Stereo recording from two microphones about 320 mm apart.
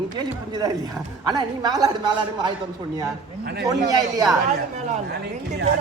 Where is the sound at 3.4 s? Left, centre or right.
Right.